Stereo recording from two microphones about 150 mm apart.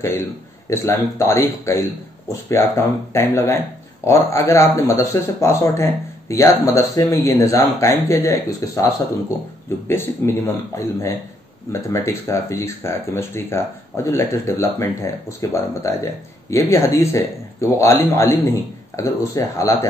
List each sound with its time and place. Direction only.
0.0 s speech: 15° left (ahead or behind)
9.8 s speech: 15° left (ahead or behind)
11.7 s speech: 20° left (ahead or behind)